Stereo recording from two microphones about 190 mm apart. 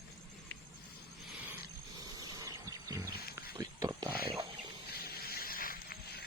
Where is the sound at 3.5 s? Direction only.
20° right (ahead or behind).